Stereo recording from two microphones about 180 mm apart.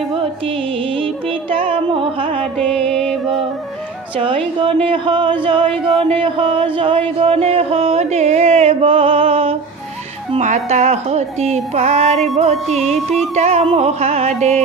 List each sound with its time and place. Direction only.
0.1 s music: 30° right (ahead or behind)
2.5 s music: 5° left (ahead or behind)
4.6 s speech: 30° right (ahead or behind)
12.6 s music: centre (ahead or behind)
13.3 s speech: 35° right (ahead or behind)